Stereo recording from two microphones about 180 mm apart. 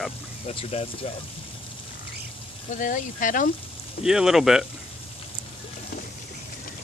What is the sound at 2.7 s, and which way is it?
Speech, 45° left (ahead or behind).